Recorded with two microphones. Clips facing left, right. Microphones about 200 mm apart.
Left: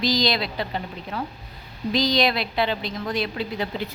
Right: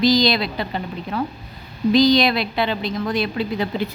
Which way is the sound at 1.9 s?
65° right (ahead or behind).